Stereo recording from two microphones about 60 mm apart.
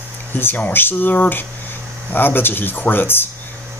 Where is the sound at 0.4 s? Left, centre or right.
Left.